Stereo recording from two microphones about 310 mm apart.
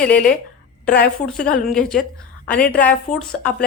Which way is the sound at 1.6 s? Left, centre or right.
Centre.